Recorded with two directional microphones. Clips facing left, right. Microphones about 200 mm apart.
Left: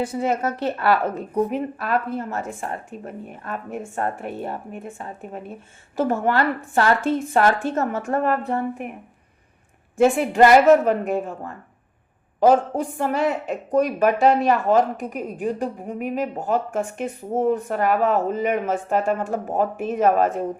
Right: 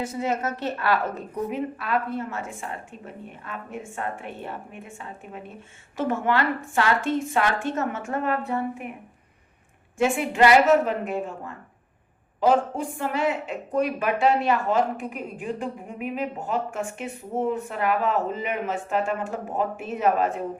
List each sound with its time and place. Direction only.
0.0 s a woman's voice: 30° left (ahead or behind)
10.0 s speech: 40° left (ahead or behind)
12.4 s a woman's voice: 40° left (ahead or behind)